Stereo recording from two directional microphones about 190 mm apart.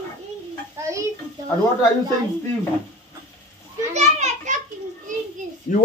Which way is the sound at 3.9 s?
35° right (ahead or behind).